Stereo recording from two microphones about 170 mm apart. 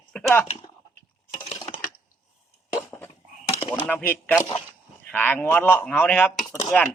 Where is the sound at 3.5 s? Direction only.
35° left (ahead or behind).